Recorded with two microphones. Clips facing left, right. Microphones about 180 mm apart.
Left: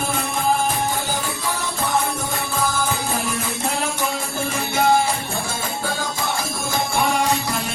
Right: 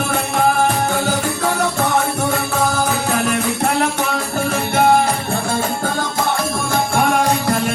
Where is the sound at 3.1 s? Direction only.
70° right (ahead or behind).